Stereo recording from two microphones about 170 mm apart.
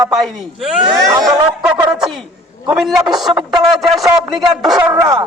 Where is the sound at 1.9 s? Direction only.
5° right (ahead or behind).